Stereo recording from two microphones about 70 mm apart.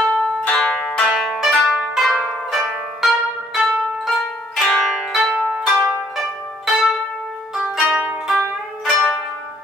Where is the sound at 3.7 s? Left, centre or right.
Centre.